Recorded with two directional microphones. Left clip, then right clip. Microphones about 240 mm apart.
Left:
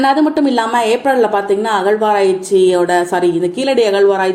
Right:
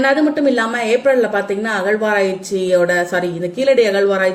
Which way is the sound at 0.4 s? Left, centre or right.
Left.